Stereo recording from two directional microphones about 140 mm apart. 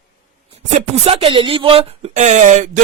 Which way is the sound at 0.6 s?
50° right (ahead or behind).